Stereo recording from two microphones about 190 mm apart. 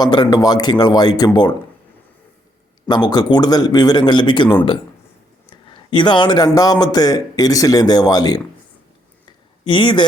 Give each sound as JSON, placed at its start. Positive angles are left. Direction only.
{"t": 0.0, "sound": "speech", "side_deg": 20}
{"t": 2.9, "sound": "speech", "side_deg": 20}
{"t": 5.5, "sound": "speech", "side_deg": 25}
{"t": 9.6, "sound": "speech", "side_deg": 25}